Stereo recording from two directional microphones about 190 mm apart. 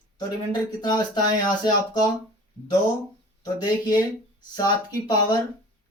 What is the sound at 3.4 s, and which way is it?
Speech, 20° left (ahead or behind).